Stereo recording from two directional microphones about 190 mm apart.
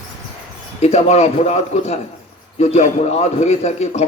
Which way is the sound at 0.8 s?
35° left (ahead or behind).